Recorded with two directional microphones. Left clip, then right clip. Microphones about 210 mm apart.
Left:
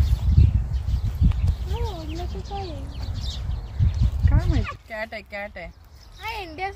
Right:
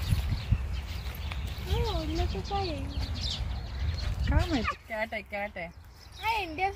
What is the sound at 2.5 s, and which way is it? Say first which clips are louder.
Speech: right 1 dB; 30° right (ahead or behind).